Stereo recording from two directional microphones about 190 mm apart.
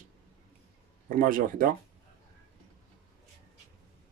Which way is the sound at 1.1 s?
45° right (ahead or behind).